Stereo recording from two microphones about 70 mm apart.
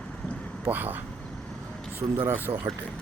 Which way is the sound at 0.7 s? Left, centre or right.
Right.